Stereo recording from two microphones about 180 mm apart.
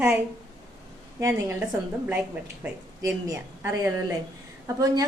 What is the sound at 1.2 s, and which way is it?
Speech, 15° right (ahead or behind).